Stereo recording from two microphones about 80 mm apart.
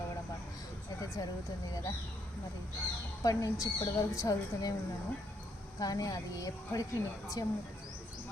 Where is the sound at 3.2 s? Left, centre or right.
Left.